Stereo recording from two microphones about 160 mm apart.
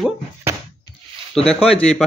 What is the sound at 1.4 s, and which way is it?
Speech, 35° left (ahead or behind).